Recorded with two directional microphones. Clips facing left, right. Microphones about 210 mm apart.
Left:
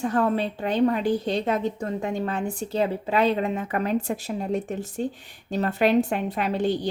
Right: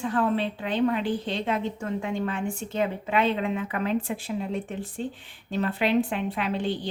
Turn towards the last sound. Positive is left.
turn(degrees=45)  # may be behind; listen again after turning